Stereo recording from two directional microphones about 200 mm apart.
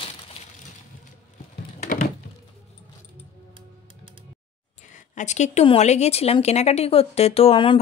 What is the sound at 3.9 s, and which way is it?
Music, 25° right (ahead or behind).